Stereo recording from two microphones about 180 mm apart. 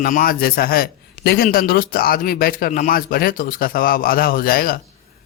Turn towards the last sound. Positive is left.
turn(degrees=55)  # may be behind; listen again after turning